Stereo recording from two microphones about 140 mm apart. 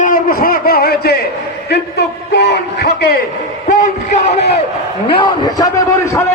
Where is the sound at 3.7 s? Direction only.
65° left (ahead or behind).